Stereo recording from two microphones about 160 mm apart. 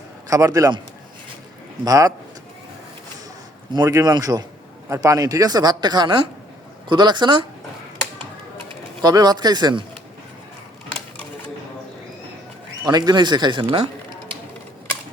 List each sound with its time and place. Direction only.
0.3 s speech: 20° right (ahead or behind)
1.8 s speech: 20° right (ahead or behind)
3.8 s speech: 20° right (ahead or behind)
9.0 s speech: 25° right (ahead or behind)
12.8 s speech: 25° right (ahead or behind)